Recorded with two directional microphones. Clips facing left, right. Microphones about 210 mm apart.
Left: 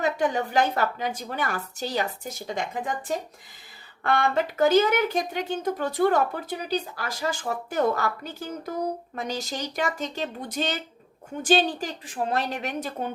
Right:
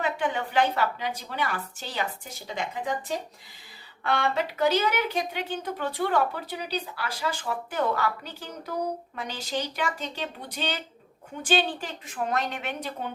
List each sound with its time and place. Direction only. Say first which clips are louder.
0.0 s a woman's voice: left 4 dB; 40° left (ahead or behind)
4.0 s a woman's voice: left 3 dB; 50° left (ahead or behind)